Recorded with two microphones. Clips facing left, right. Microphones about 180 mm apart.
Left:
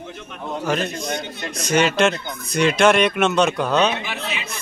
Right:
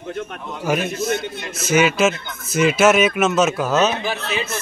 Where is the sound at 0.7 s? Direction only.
10° right (ahead or behind).